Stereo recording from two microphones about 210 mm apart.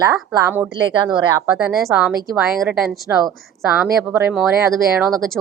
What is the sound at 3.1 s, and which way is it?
Speech, 10° right (ahead or behind).